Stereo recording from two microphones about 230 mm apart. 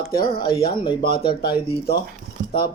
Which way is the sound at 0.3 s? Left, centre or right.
Centre.